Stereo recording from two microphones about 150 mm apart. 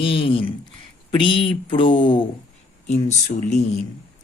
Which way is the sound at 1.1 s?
35° left (ahead or behind).